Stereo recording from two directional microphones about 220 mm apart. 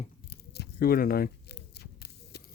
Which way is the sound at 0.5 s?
45° left (ahead or behind).